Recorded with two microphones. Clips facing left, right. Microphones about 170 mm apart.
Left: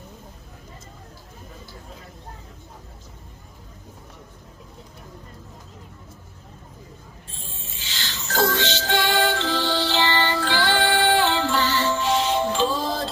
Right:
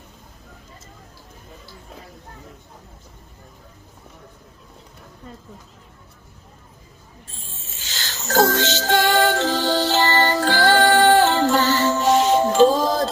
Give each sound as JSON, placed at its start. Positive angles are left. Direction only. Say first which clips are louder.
{"t": 7.8, "sound": "music", "louder": "right 1 dB", "side_deg": -45}